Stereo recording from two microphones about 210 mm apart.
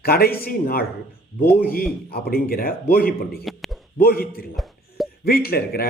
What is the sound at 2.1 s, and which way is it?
Speech, 45° left (ahead or behind).